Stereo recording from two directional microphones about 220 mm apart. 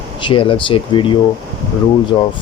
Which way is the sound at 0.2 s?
20° left (ahead or behind).